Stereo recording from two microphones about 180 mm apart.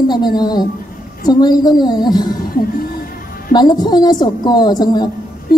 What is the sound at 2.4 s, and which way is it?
Music, 55° left (ahead or behind).